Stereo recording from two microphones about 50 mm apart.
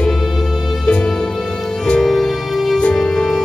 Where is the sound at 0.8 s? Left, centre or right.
Left.